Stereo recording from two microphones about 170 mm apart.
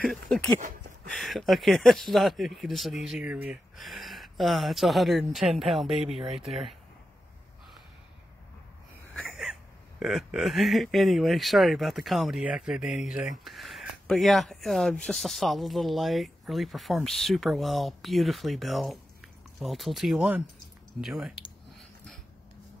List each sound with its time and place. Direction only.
0.0 s speech: 5° left (ahead or behind)
5.9 s speech: 35° right (ahead or behind)
9.3 s speech: 5° right (ahead or behind)
21.0 s a sound: centre (ahead or behind)